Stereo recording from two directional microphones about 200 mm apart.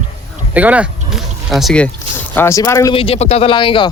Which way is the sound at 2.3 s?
15° left (ahead or behind).